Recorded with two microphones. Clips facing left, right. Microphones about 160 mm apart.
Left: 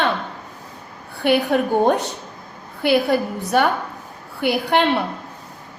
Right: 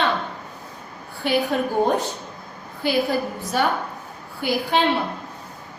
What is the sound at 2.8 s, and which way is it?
A woman's voice, 65° left (ahead or behind).